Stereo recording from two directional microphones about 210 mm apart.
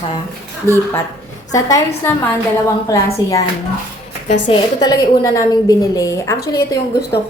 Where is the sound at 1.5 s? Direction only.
15° left (ahead or behind).